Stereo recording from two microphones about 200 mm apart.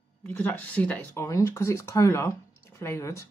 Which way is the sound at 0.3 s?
10° left (ahead or behind).